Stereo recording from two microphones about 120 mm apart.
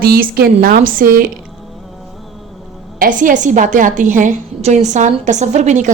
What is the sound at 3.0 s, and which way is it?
A woman's voice, 90° right.